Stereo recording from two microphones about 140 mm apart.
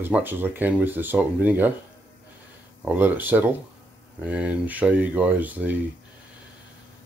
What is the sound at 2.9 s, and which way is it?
Speech, 10° right (ahead or behind).